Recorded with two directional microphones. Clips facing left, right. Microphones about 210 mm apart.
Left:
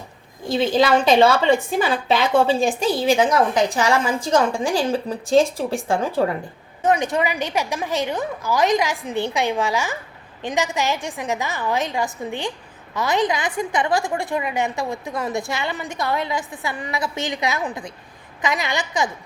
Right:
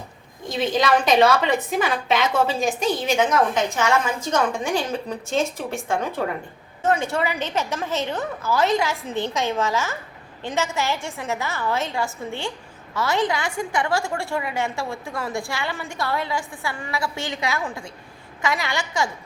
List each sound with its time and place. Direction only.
0.4 s a woman's voice: 30° left (ahead or behind)
6.8 s a woman's voice: 15° left (ahead or behind)